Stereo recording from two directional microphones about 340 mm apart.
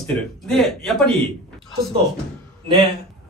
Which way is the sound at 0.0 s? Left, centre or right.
Centre.